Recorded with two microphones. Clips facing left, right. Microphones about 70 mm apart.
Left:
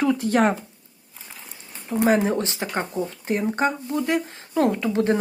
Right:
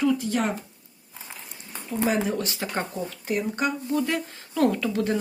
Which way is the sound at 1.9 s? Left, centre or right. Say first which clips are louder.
Left 5 dB; left.